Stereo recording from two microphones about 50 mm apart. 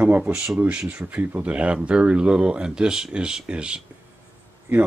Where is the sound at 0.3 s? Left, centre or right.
Right.